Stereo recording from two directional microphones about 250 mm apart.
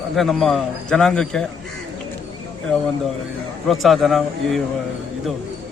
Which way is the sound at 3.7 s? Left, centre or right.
Centre.